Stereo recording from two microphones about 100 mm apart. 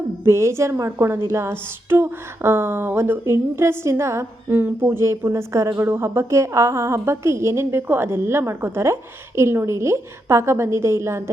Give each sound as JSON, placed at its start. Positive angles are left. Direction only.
{"t": 0.3, "sound": "a woman's voice", "side_deg": -25}